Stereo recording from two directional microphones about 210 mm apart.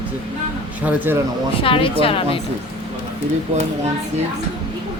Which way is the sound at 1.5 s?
25° left (ahead or behind).